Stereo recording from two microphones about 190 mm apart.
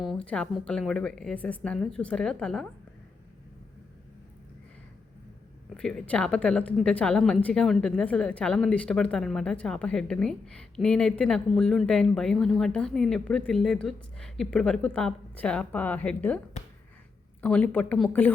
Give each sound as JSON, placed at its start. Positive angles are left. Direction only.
{"t": 0.0, "sound": "a woman's voice", "side_deg": 0}
{"t": 5.7, "sound": "a woman's voice", "side_deg": 5}
{"t": 17.4, "sound": "speech", "side_deg": 5}